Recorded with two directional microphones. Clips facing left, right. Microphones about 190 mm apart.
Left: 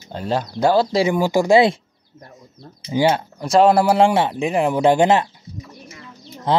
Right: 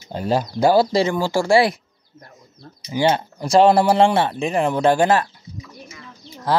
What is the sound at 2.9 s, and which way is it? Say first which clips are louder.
Speech: left 2 dB; 20° left (ahead or behind).